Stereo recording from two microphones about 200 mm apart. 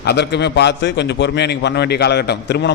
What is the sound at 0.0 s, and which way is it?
A man's voice, 55° left (ahead or behind).